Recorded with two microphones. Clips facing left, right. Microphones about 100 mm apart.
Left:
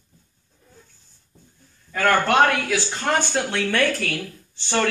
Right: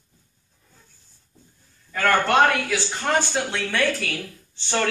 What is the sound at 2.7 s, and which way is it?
Speech, centre (ahead or behind).